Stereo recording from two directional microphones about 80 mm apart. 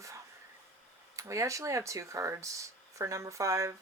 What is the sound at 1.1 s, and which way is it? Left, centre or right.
Speech, right.